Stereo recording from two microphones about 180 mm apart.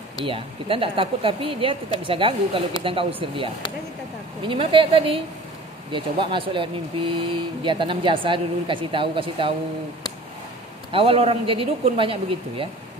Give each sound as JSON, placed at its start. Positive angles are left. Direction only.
{"t": 0.2, "sound": "speech", "side_deg": -30}
{"t": 10.9, "sound": "speech", "side_deg": -30}